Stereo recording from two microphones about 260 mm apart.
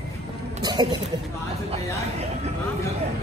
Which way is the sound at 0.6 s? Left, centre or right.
Centre.